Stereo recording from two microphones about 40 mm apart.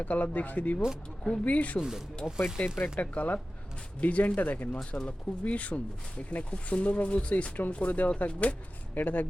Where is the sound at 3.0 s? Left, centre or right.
Left.